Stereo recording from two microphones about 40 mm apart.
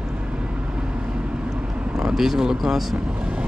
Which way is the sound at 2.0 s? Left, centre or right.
Centre.